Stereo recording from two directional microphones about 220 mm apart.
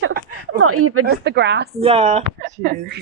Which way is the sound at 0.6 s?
80° right.